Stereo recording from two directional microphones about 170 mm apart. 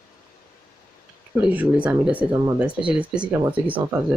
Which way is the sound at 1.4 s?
10° right (ahead or behind).